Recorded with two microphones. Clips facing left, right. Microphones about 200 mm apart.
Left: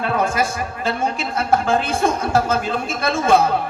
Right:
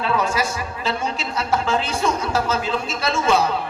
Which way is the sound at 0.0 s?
50° left (ahead or behind).